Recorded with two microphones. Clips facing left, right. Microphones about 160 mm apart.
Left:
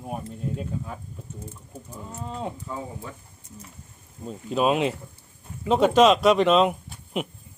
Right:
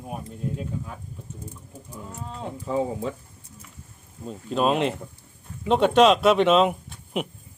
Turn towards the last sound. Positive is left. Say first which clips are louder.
# right 1 dB
turn(degrees=0)  # may be behind; listen again after turning